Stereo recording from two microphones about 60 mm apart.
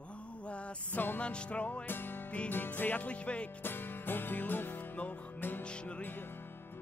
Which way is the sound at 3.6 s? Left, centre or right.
Left.